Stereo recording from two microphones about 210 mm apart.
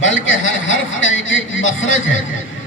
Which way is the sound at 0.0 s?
70° left (ahead or behind).